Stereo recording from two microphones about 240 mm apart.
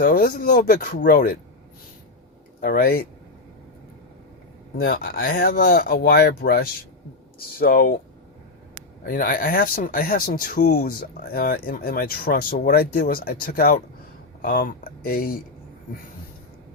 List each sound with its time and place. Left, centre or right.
0.0 s speech: left
2.6 s speech: left
4.8 s speech: left
9.0 s speech: left